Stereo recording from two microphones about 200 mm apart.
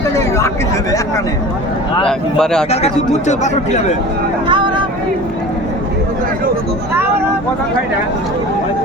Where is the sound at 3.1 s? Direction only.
35° left (ahead or behind).